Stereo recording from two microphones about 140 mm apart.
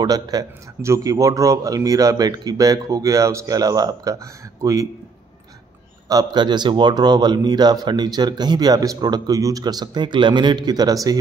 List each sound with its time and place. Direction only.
0.0 s speech: 25° right (ahead or behind)
6.0 s speech: 30° right (ahead or behind)